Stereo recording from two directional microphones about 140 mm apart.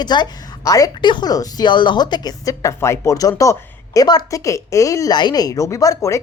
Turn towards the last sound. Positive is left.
turn(degrees=25)  # may be behind; listen again after turning